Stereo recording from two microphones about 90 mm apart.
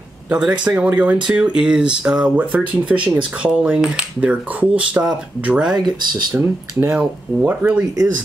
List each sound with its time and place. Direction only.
0.3 s speech: 10° right (ahead or behind)
5.8 s speech: 50° right (ahead or behind)
6.3 s speech: 20° right (ahead or behind)